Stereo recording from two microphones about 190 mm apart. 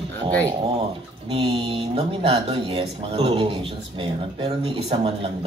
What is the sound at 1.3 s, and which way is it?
Speech, 30° right (ahead or behind).